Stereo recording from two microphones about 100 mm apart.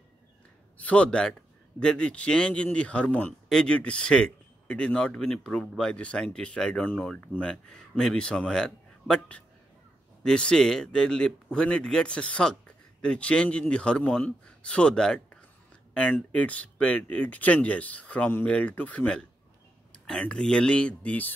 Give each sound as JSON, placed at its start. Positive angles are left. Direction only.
{"t": 0.7, "sound": "a man's voice", "side_deg": 15}